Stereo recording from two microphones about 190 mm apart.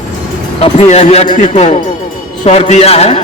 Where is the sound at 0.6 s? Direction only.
35° left (ahead or behind).